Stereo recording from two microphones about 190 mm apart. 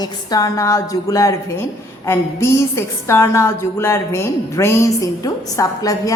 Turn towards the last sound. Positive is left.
turn(degrees=20)  # may be behind; listen again after turning